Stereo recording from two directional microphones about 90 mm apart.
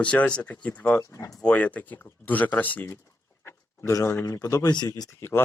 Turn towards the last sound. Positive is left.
turn(degrees=25)  # may be behind; listen again after turning